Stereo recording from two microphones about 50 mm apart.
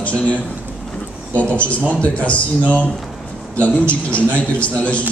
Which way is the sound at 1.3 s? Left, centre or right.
Left.